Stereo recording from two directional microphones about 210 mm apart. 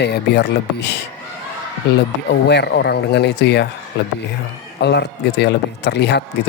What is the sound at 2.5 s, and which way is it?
Speech, 50° left (ahead or behind).